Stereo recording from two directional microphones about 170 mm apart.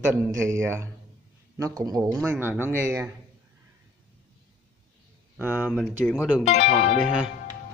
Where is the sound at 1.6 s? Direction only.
20° right (ahead or behind).